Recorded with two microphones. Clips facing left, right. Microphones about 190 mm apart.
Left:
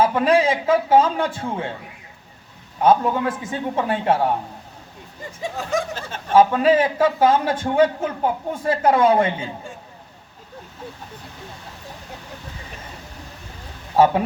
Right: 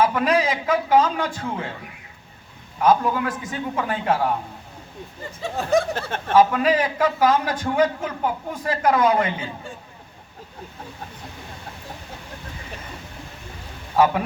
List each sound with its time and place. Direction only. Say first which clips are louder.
0.0 s a man's voice: left 3 dB; 30° left (ahead or behind)
2.8 s a man's voice: left 2 dB; 25° left (ahead or behind)
5.9 s speech: right 4 dB; 60° right (ahead or behind)
6.3 s a man's voice: left 2 dB; 30° left (ahead or behind)
13.9 s speech: left 3 dB; 30° left (ahead or behind)